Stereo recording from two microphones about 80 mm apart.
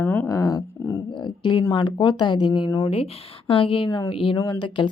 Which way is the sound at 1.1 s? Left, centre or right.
Left.